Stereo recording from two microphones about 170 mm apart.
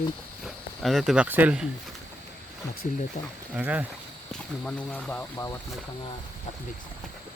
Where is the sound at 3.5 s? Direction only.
10° right (ahead or behind).